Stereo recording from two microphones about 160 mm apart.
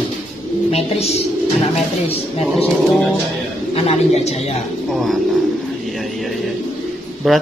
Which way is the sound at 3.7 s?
40° left (ahead or behind).